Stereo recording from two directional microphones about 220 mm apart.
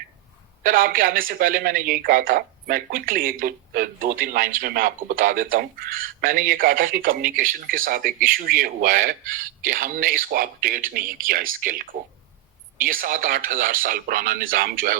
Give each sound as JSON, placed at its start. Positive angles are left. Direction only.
{"t": 0.6, "sound": "speech", "side_deg": -40}